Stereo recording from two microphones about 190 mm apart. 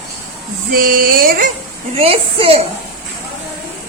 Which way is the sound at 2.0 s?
30° right (ahead or behind).